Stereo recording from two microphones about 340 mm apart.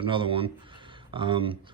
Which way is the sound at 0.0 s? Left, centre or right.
Centre.